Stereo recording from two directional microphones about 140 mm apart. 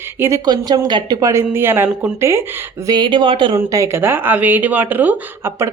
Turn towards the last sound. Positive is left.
turn(degrees=-15)  # may be behind; listen again after turning